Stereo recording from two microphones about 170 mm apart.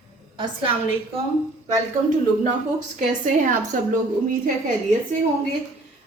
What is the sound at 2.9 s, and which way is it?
Speech, 50° right (ahead or behind).